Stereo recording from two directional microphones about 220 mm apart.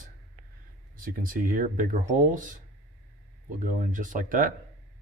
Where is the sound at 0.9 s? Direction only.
40° right (ahead or behind).